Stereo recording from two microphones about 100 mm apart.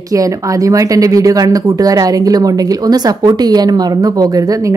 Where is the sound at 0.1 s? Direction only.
35° right (ahead or behind).